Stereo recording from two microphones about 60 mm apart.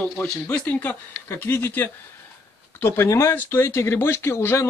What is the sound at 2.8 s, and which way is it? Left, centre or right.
Speech, left.